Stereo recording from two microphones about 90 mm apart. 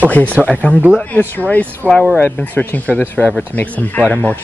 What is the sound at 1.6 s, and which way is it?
Speech, 20° right (ahead or behind).